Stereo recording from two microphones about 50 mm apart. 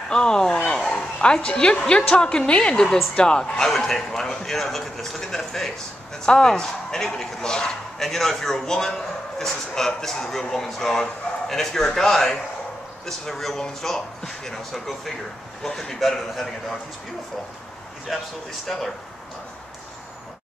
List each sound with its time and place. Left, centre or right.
0.1 s a man's voice: centre
18.1 s a man's voice: centre